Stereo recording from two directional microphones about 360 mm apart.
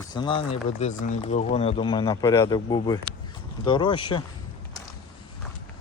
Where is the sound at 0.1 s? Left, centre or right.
Centre.